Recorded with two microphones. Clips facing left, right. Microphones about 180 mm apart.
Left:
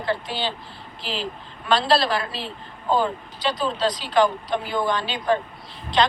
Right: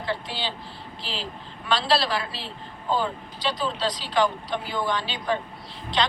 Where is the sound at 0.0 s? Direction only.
50° left (ahead or behind).